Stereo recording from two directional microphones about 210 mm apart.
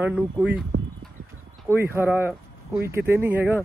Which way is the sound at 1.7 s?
10° right (ahead or behind).